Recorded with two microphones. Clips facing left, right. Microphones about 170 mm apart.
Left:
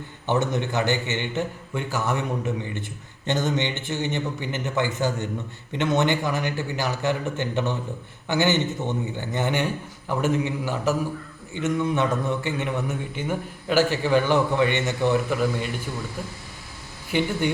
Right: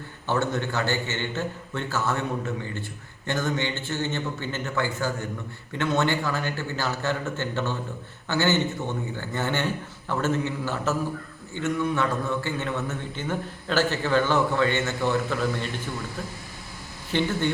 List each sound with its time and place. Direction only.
0.3 s a man's voice: 20° left (ahead or behind)
17.1 s a man's voice: 15° left (ahead or behind)